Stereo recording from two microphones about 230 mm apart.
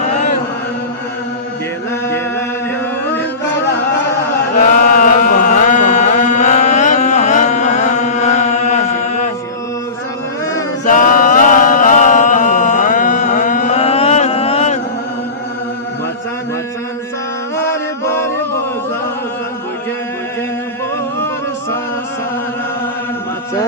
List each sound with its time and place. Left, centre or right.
4.9 s chant: left
10.8 s a sound: left
17.6 s music: centre